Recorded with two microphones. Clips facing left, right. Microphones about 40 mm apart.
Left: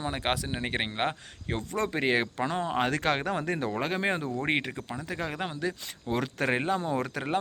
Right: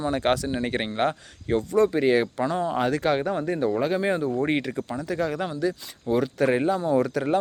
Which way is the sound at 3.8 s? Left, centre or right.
Left.